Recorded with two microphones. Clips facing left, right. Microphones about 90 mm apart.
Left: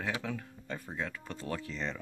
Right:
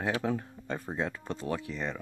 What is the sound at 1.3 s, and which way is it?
Speech, 20° right (ahead or behind).